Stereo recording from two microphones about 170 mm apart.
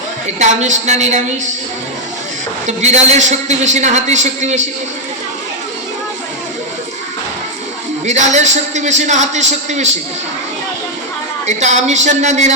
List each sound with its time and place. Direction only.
0.3 s a man's voice: 45° right (ahead or behind)
2.6 s a man's voice: 40° right (ahead or behind)
8.0 s a man's voice: 45° right (ahead or behind)
11.4 s a man's voice: 45° right (ahead or behind)